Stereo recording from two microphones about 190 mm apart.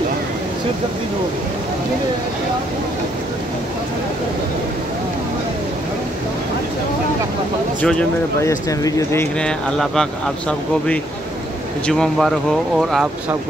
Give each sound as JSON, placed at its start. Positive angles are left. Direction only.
{"t": 7.8, "sound": "speech", "side_deg": 10}
{"t": 11.8, "sound": "speech", "side_deg": 0}